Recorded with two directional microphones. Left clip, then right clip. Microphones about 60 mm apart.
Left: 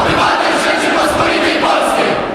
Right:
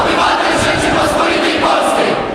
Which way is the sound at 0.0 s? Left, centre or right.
Centre.